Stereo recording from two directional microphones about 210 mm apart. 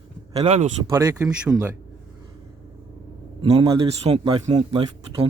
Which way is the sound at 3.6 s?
15° right (ahead or behind).